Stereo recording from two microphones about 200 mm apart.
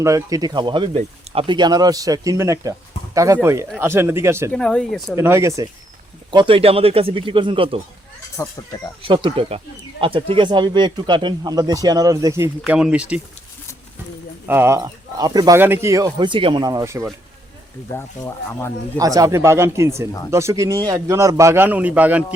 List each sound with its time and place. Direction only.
0.0 s a man's voice: 15° right (ahead or behind)
4.5 s speech: 5° left (ahead or behind)
5.1 s a man's voice: 15° right (ahead or behind)
6.3 s speech: 25° right (ahead or behind)
8.4 s speech: 15° left (ahead or behind)
9.0 s speech: 25° right (ahead or behind); by 13.2 s 5° right (ahead or behind)
14.4 s a man's voice: 10° right (ahead or behind)
17.9 s speech: 15° left (ahead or behind)
18.9 s a man's voice: 15° right (ahead or behind)